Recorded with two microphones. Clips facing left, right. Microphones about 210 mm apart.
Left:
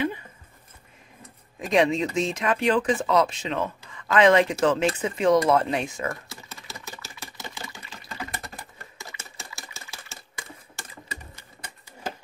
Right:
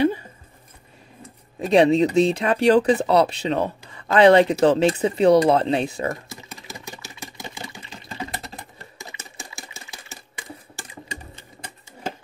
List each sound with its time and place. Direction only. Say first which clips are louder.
1.6 s speech: right 6 dB; 35° right (ahead or behind)
6.0 s a sound: right 4 dB; 15° right (ahead or behind)
7.5 s sewing machine: right 3 dB; 15° right (ahead or behind)
7.8 s typing: right 4 dB; 25° right (ahead or behind)